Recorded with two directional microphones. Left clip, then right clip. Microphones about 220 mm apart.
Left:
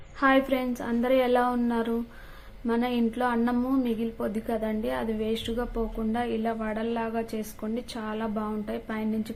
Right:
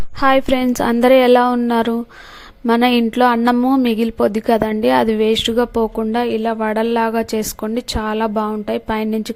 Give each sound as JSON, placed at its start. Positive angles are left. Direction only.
{"t": 0.2, "sound": "a woman's voice", "side_deg": -45}